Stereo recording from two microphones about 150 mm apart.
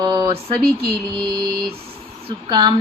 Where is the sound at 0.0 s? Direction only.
30° right (ahead or behind).